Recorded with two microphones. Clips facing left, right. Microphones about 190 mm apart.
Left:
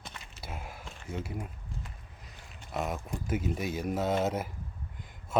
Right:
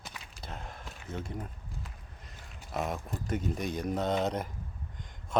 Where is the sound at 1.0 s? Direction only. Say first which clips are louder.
Left 1 dB; 5° left (ahead or behind).